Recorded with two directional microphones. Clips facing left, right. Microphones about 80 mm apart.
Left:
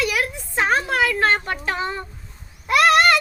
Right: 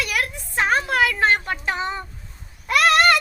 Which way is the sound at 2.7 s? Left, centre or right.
Centre.